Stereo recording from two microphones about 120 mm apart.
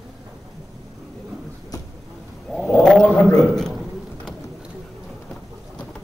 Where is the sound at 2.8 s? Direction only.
5° left (ahead or behind).